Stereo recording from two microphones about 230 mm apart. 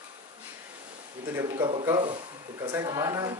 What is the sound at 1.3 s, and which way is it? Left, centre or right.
Speech, centre.